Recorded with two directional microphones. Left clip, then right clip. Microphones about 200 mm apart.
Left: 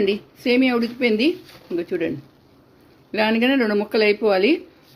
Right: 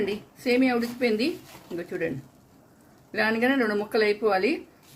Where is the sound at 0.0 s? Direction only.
40° left (ahead or behind).